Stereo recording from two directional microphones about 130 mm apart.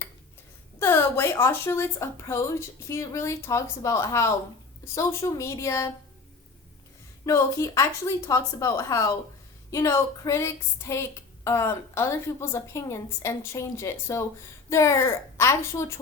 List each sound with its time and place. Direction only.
0.8 s speech: 20° left (ahead or behind)
7.3 s speech: 25° left (ahead or behind)